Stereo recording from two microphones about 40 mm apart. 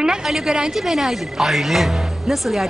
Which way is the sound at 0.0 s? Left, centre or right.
Centre.